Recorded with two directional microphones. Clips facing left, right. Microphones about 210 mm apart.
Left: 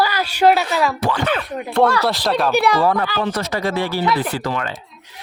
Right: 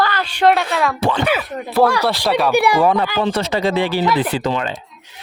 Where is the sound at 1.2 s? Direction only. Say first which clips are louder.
Right 2 dB; 5° right (ahead or behind).